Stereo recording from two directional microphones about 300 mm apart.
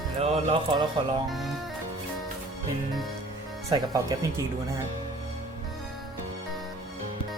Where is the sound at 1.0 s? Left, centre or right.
Centre.